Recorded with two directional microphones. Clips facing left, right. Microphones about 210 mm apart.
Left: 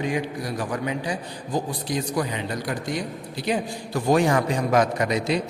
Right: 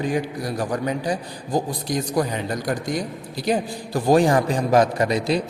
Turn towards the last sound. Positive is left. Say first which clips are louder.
# right 2 dB
turn(degrees=-35)  # may be behind; listen again after turning